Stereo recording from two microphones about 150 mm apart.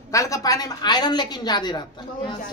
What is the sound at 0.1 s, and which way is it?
A woman's voice, 20° left (ahead or behind).